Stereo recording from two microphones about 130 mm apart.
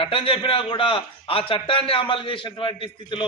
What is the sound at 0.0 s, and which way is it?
A man's voice, 45° left (ahead or behind).